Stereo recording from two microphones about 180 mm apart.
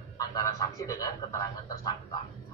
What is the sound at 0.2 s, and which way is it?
A man's voice, 20° left (ahead or behind).